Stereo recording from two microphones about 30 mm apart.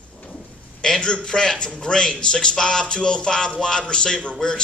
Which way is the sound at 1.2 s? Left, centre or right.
Left.